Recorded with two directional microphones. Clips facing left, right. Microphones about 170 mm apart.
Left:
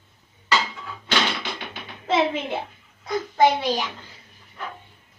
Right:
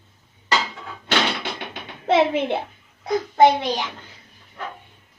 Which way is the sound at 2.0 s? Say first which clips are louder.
Right 4 dB; 65° right (ahead or behind).